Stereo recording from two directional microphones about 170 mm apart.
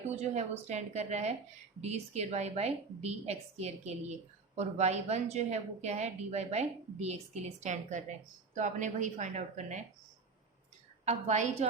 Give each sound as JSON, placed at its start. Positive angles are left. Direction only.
{"t": 0.2, "sound": "speech", "side_deg": -40}
{"t": 11.0, "sound": "a woman's voice", "side_deg": -40}